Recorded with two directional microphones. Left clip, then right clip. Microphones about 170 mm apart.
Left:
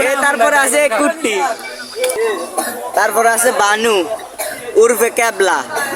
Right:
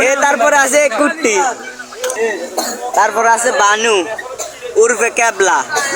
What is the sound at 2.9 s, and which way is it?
Speech, 10° left (ahead or behind).